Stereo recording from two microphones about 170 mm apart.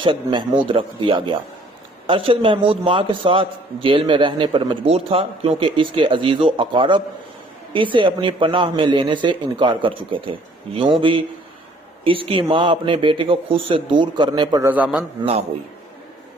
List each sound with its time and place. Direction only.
0.0 s a man's voice: 30° right (ahead or behind)
12.0 s a man's voice: 30° right (ahead or behind)
14.6 s a man's voice: 10° right (ahead or behind)
15.2 s a man's voice: 35° right (ahead or behind)